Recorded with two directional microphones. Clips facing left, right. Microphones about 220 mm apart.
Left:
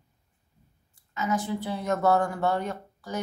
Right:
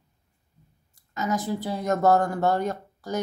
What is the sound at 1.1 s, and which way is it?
Speech, 40° right (ahead or behind).